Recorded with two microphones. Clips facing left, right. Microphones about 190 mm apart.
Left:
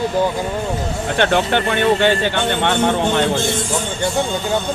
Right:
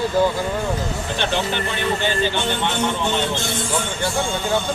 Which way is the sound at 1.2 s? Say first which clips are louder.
Left 7 dB; 60° left (ahead or behind).